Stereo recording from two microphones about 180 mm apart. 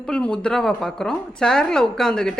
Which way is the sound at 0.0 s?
5° left (ahead or behind).